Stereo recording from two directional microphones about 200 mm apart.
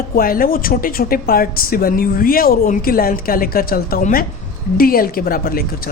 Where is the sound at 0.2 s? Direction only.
45° left (ahead or behind).